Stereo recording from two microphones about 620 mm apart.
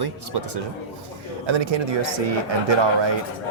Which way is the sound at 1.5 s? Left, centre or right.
Right.